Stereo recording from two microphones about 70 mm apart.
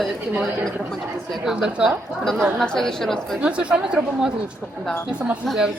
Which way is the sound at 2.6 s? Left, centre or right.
Centre.